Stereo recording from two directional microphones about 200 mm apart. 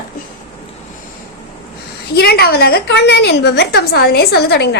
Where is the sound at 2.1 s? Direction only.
50° left (ahead or behind).